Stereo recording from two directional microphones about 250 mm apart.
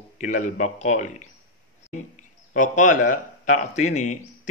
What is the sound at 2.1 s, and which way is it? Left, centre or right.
Speech, left.